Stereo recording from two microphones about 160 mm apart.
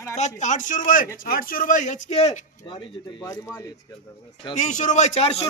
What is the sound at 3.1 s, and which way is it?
Speech, 20° left (ahead or behind).